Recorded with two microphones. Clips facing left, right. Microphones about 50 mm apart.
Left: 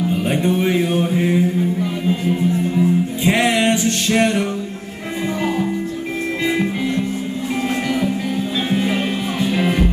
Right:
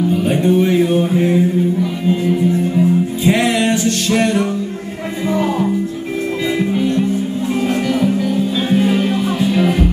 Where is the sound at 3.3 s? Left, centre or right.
Centre.